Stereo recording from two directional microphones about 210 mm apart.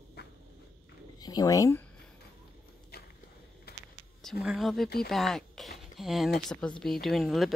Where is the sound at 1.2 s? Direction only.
15° left (ahead or behind).